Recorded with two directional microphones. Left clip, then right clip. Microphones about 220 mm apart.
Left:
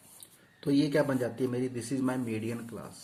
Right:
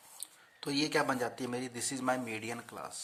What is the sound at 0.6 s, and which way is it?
Speech, 50° right (ahead or behind).